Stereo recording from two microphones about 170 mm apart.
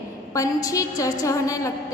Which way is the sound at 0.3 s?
20° left (ahead or behind).